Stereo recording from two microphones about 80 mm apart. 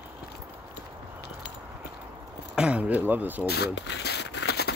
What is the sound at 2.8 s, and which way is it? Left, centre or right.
Speech, right.